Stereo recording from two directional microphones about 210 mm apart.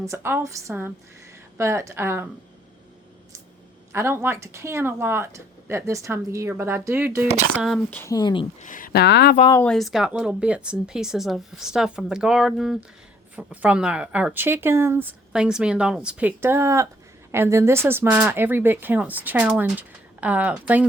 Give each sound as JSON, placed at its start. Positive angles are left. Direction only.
{"t": 0.0, "sound": "speech", "side_deg": -10}
{"t": 3.9, "sound": "speech", "side_deg": -10}
{"t": 7.5, "sound": "speech", "side_deg": 0}
{"t": 8.5, "sound": "speech", "side_deg": 35}
{"t": 9.5, "sound": "speech", "side_deg": 5}